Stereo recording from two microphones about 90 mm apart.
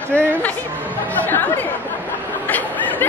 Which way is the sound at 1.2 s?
20° left (ahead or behind).